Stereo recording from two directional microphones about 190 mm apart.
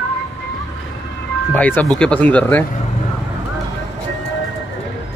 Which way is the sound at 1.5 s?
10° left (ahead or behind).